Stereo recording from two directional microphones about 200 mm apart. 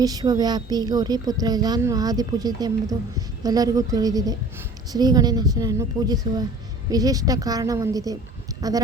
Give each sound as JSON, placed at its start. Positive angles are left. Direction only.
{"t": 0.0, "sound": "a woman's voice", "side_deg": -20}